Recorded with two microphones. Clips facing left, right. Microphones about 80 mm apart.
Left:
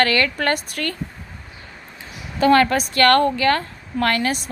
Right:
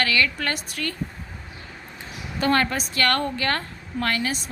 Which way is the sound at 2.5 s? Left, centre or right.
Left.